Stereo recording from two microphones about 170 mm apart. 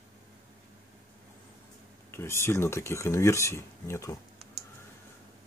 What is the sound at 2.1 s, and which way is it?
Speech, 15° left (ahead or behind).